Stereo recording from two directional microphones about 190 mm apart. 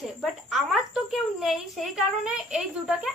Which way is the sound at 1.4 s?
Centre (ahead or behind).